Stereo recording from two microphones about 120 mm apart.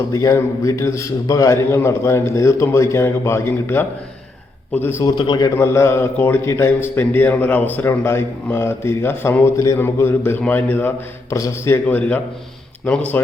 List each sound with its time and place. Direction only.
0.1 s a man's voice: 25° left (ahead or behind)
5.0 s a man's voice: 35° left (ahead or behind); by 12.2 s 15° left (ahead or behind)